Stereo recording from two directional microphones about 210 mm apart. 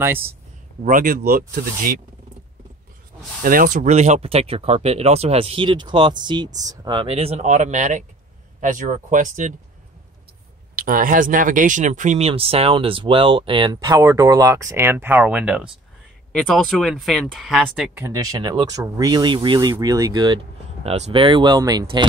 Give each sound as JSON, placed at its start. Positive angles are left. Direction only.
{"t": 0.0, "sound": "speech", "side_deg": -10}
{"t": 0.8, "sound": "speech", "side_deg": -40}
{"t": 3.4, "sound": "speech", "side_deg": -40}
{"t": 10.8, "sound": "speech", "side_deg": -40}
{"t": 20.8, "sound": "speech", "side_deg": -30}